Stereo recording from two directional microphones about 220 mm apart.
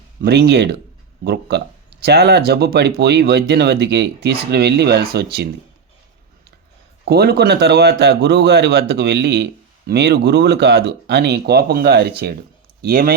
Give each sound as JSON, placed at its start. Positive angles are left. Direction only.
{"t": 0.2, "sound": "a man's voice", "side_deg": -50}
{"t": 7.1, "sound": "a man's voice", "side_deg": -45}